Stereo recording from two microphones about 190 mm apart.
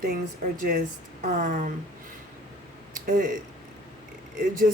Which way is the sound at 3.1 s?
45° right (ahead or behind).